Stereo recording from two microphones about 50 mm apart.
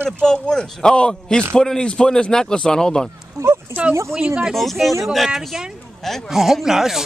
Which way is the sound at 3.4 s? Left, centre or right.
Right.